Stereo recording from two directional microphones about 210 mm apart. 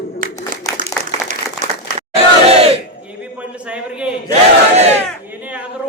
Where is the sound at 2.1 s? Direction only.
30° right (ahead or behind).